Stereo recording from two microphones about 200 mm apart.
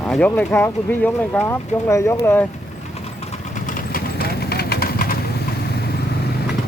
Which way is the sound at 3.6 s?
45° left (ahead or behind).